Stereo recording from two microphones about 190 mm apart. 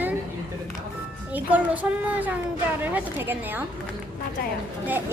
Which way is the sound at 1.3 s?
10° right (ahead or behind).